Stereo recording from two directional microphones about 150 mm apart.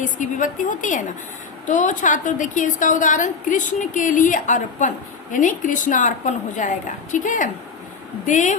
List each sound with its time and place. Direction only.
0.0 s a woman's voice: 60° left (ahead or behind)